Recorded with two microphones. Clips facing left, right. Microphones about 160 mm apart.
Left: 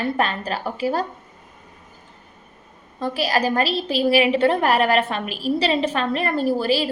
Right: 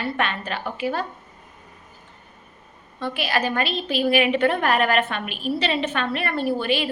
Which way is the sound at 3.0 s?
40° left (ahead or behind).